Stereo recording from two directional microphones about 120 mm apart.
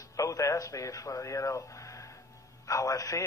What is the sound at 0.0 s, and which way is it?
Speech, 30° left (ahead or behind).